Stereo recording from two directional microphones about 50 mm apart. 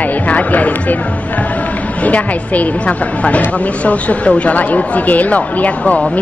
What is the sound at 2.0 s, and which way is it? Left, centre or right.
Speech, left.